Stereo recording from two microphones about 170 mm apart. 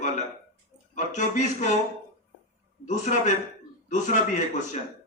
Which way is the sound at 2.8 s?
45° left (ahead or behind).